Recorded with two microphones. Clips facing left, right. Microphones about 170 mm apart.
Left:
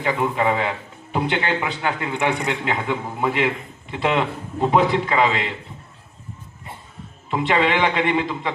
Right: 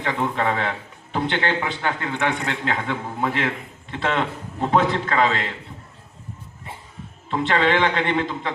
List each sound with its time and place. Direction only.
0.0 s a man's voice: 10° left (ahead or behind)
7.3 s a man's voice: 15° left (ahead or behind)